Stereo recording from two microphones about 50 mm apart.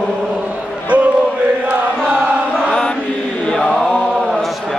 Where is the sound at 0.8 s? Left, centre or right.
Right.